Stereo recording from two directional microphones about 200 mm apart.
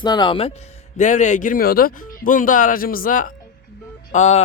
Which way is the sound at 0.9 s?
35° left (ahead or behind).